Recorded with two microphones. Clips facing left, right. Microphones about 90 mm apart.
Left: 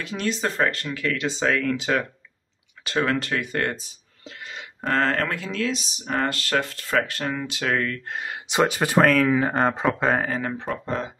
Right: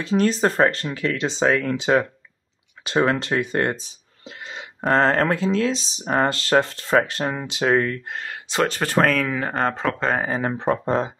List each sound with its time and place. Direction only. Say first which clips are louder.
0.0 s speech: right 7 dB; 35° right (ahead or behind)
8.2 s speech: left 1 dB; 15° left (ahead or behind)
9.0 s speech: left 5 dB; centre (ahead or behind)
10.6 s speech: right 7 dB; 45° right (ahead or behind)